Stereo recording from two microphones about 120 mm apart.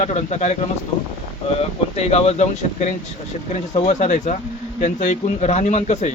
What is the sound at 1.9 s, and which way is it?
Speech, 60° left (ahead or behind).